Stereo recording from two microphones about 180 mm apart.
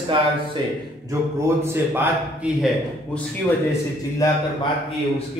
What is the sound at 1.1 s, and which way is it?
A man's voice, 15° right (ahead or behind).